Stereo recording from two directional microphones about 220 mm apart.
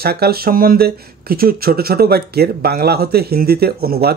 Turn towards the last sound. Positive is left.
turn(degrees=-45)  # may be behind; listen again after turning